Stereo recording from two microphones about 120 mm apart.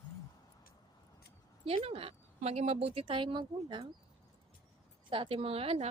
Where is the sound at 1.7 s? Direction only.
55° right (ahead or behind).